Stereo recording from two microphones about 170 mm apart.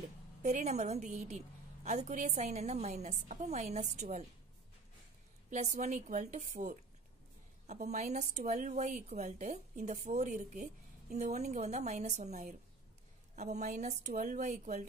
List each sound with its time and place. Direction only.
0.4 s a woman's voice: 45° right (ahead or behind)
5.5 s a woman's voice: 50° right (ahead or behind)